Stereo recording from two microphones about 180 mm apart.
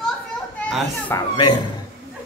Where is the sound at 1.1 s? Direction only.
25° left (ahead or behind).